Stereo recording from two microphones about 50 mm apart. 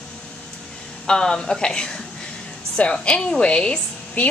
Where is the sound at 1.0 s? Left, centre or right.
Centre.